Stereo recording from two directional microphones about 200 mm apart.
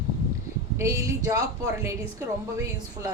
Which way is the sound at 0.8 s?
15° right (ahead or behind).